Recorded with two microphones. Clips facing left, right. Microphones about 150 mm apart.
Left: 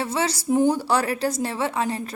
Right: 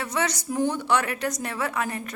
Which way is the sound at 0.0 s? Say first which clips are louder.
Left 3 dB; 30° left (ahead or behind).